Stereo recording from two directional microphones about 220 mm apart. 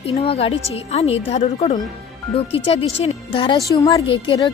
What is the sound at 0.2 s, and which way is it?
Speech, 25° left (ahead or behind).